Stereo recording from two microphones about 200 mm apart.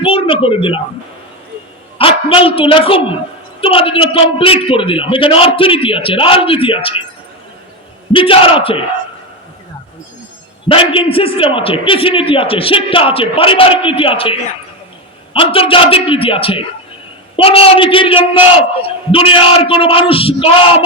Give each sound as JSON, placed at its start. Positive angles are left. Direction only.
{"t": 0.0, "sound": "a man's voice", "side_deg": 25}
{"t": 2.0, "sound": "a man's voice", "side_deg": 25}
{"t": 8.1, "sound": "a man's voice", "side_deg": 25}
{"t": 10.7, "sound": "a man's voice", "side_deg": 25}